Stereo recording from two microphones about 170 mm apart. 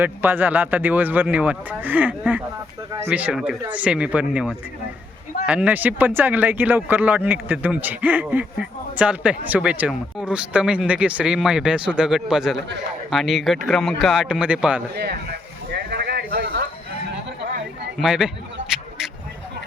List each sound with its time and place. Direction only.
0.0 s speech: 10° right (ahead or behind)
14.9 s a sound: 70° right (ahead or behind)
18.0 s speech: 5° right (ahead or behind)